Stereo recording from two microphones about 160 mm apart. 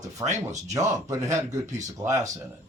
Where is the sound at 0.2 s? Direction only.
20° right (ahead or behind).